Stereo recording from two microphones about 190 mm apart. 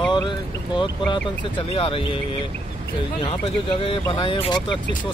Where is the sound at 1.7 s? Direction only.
30° left (ahead or behind).